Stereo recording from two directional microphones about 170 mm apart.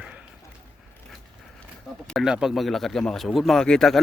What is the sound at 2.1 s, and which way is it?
Speech, centre (ahead or behind).